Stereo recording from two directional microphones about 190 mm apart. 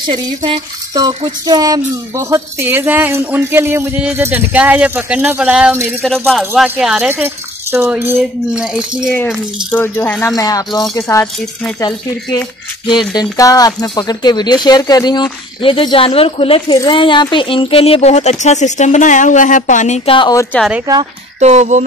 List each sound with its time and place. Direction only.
0.0 s a sound: 25° right (ahead or behind)
2.1 s speech: 15° right (ahead or behind)
6.0 s speech: centre (ahead or behind)
9.1 s speech: 10° left (ahead or behind); by 20.2 s 40° left (ahead or behind)
20.2 s speech: 20° left (ahead or behind)
20.5 s speech: centre (ahead or behind)
20.8 s a sound: 20° right (ahead or behind)
21.4 s speech: 35° right (ahead or behind)